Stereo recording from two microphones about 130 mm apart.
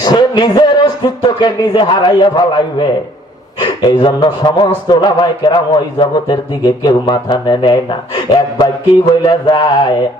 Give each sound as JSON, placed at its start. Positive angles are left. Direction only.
{"t": 0.0, "sound": "speech", "side_deg": 30}